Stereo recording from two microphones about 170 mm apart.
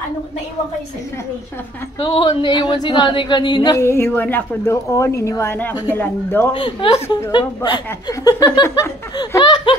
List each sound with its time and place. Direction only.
2.0 s a man's voice: 30° left (ahead or behind); by 6.5 s 15° left (ahead or behind)
6.5 s a woman's voice: 30° left (ahead or behind)